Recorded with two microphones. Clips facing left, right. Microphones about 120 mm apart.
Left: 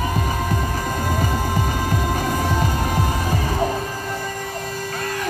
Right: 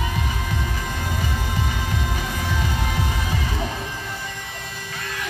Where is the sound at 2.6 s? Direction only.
40° left (ahead or behind).